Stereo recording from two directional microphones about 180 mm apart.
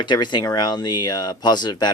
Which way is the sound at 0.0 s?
25° left (ahead or behind).